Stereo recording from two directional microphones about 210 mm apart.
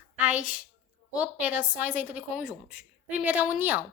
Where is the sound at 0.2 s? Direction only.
5° right (ahead or behind).